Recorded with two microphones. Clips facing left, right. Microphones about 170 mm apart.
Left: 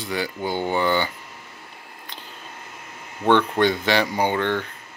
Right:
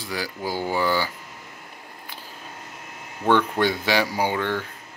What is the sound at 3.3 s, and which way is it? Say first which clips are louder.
Speech: left 2 dB; 10° right (ahead or behind).